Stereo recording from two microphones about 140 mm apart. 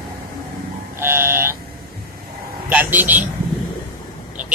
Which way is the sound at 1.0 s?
15° right (ahead or behind).